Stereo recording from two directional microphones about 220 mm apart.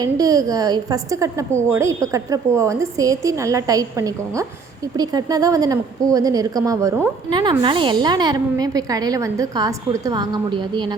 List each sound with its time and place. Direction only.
0.0 s a woman's voice: 15° right (ahead or behind)